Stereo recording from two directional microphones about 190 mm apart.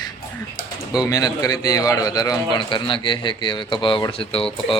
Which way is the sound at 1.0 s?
20° left (ahead or behind).